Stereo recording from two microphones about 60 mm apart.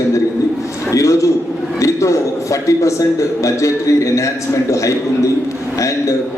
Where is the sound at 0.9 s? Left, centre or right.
Left.